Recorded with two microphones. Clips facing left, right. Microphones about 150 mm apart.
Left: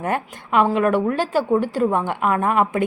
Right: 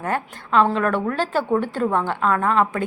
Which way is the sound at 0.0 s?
15° left (ahead or behind).